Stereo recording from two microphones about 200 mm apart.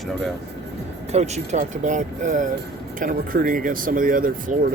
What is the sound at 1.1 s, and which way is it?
Speech, 35° right (ahead or behind).